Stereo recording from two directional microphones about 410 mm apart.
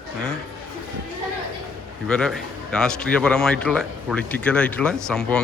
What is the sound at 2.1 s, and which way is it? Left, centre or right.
Speech, centre.